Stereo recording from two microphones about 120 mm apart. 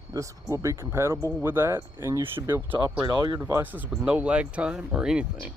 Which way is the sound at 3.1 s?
35° right (ahead or behind).